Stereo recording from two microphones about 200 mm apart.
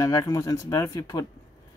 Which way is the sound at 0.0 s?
15° left (ahead or behind).